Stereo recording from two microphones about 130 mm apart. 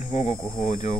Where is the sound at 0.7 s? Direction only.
85° left.